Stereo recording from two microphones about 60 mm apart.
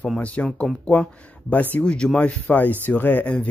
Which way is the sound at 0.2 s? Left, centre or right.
Left.